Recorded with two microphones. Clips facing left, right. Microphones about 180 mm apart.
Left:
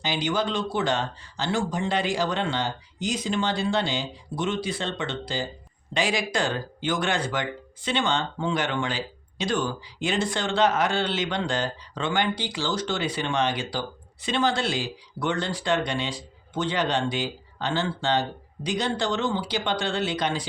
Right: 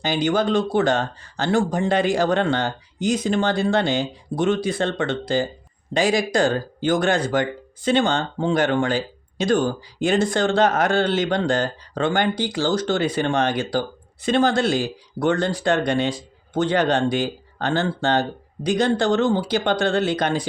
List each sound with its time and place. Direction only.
0.0 s speech: 50° right (ahead or behind)